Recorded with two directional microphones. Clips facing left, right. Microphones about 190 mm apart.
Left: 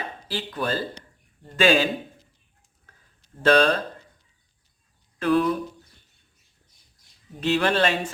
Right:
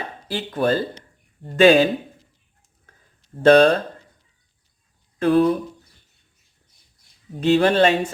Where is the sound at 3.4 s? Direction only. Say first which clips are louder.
Right 6 dB; 50° right (ahead or behind).